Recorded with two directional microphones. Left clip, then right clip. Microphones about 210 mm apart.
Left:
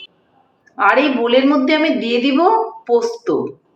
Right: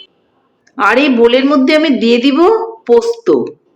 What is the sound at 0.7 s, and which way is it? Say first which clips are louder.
A woman's voice: right 4 dB; 55° right (ahead or behind).